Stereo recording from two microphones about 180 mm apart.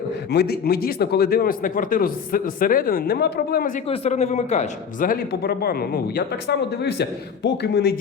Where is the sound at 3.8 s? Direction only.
35° left (ahead or behind).